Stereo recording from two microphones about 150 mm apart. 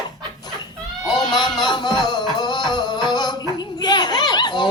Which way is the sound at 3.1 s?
30° left (ahead or behind).